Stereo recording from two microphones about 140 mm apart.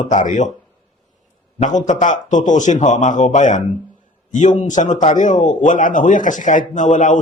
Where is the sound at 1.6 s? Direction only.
60° left (ahead or behind).